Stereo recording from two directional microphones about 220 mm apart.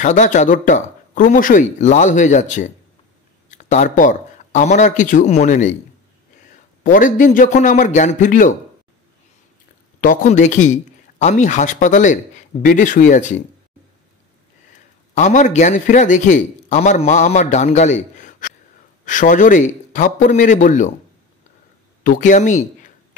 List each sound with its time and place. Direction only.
0.0 s a man's voice: 35° left (ahead or behind)
6.8 s a man's voice: 35° left (ahead or behind)
9.9 s speech: 35° left (ahead or behind)
15.1 s a man's voice: 35° left (ahead or behind)
22.0 s a man's voice: 35° left (ahead or behind)